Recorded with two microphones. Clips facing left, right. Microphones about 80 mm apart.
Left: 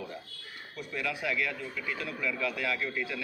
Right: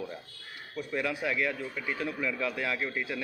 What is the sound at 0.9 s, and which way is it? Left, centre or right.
A man's voice, right.